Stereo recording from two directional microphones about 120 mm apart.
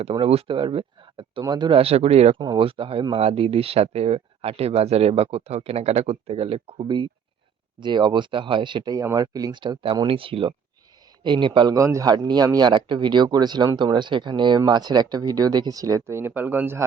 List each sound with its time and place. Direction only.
0.0 s speech: 55° right (ahead or behind)
1.8 s speech: 60° right (ahead or behind)
2.6 s speech: 45° right (ahead or behind)
9.8 s speech: 50° right (ahead or behind)
11.7 s speech: 25° right (ahead or behind)